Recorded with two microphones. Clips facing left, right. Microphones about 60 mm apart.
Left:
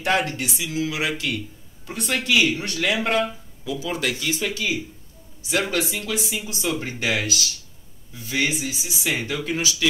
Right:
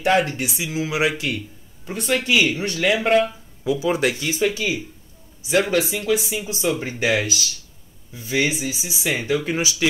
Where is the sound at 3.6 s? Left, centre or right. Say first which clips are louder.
Right 6 dB; right.